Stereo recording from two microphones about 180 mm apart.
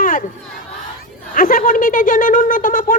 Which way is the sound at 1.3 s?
50° left (ahead or behind).